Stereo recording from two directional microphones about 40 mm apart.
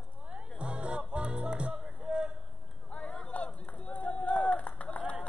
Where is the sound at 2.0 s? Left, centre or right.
Right.